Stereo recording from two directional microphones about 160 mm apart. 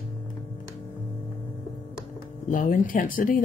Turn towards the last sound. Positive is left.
turn(degrees=60)  # may be behind; listen again after turning